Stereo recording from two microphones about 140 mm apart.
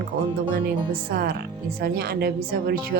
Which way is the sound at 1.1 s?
90° right.